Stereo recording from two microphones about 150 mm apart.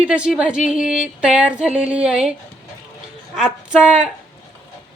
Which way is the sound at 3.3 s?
5° right (ahead or behind).